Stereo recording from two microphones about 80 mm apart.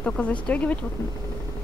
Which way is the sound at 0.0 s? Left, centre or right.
Centre.